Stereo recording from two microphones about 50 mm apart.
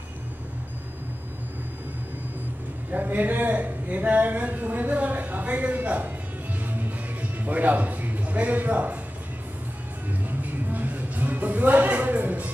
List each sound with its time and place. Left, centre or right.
2.9 s a man's voice: right
6.6 s music: right
10.4 s music: right